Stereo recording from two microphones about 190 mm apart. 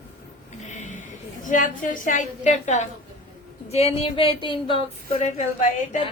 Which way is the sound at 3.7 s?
35° left (ahead or behind).